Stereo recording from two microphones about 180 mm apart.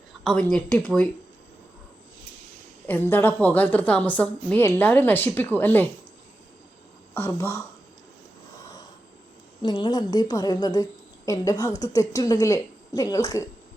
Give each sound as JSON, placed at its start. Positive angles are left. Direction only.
{"t": 0.3, "sound": "speech", "side_deg": 5}
{"t": 2.8, "sound": "a woman's voice", "side_deg": 10}
{"t": 7.1, "sound": "a woman's voice", "side_deg": 15}
{"t": 9.6, "sound": "speech", "side_deg": 25}